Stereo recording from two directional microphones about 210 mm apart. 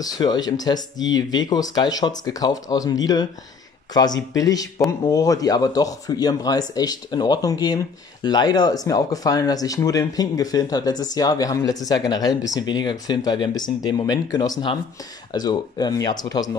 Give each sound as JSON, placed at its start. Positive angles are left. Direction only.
{"t": 0.0, "sound": "speech", "side_deg": 20}